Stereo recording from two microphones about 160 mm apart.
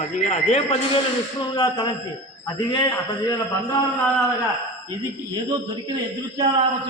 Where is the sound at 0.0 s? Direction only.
45° left (ahead or behind); by 1.9 s 30° left (ahead or behind).